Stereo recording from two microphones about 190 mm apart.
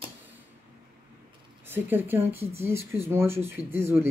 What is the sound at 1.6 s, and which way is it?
Speech, 10° right (ahead or behind).